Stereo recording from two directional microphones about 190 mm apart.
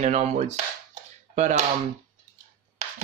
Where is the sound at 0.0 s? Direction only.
35° right (ahead or behind).